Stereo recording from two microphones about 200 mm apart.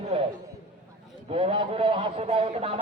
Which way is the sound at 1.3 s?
30° right (ahead or behind).